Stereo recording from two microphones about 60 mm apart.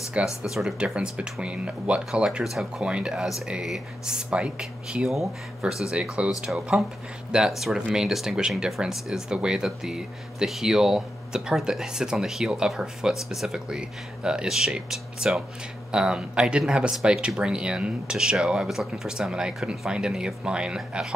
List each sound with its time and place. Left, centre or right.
0.4 s speech: centre
6.2 s speech: right
6.5 s speech: centre